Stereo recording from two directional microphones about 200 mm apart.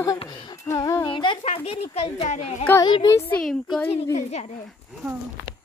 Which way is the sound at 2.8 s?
20° left (ahead or behind).